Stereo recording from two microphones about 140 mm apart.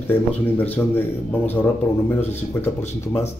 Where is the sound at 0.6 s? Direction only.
15° left (ahead or behind).